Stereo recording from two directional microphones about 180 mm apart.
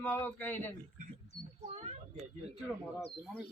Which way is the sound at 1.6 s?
35° right (ahead or behind).